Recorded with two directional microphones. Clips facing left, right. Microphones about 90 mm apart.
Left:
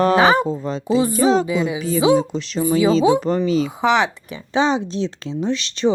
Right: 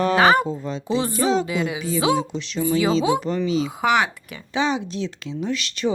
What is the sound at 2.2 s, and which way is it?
A woman's voice, 40° left (ahead or behind).